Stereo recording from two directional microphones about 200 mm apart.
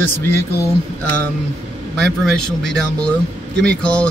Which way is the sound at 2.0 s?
5° left (ahead or behind).